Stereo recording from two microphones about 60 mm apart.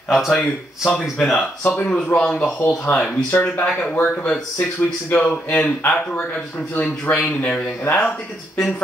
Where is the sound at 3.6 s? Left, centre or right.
Centre.